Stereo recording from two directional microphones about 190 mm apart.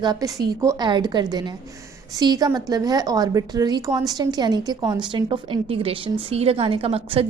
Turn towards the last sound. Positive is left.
turn(degrees=-30)  # may be behind; listen again after turning